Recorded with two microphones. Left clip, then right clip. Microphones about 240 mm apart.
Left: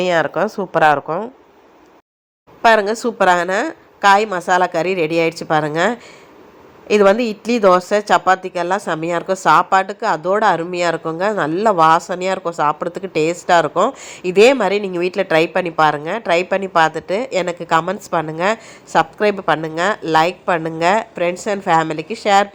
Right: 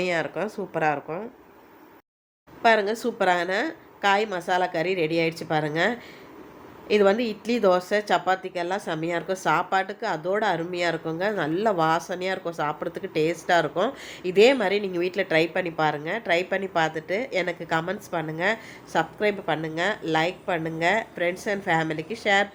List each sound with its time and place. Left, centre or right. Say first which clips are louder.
0.0 s speech: left 10 dB; left
2.6 s speech: left 8 dB; left